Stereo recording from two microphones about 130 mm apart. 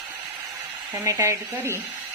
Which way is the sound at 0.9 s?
20° right (ahead or behind).